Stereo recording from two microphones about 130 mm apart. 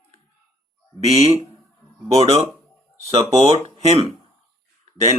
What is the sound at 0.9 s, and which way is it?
Speech, 50° right (ahead or behind).